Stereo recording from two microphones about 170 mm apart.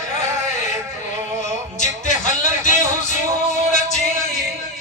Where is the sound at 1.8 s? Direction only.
45° left (ahead or behind).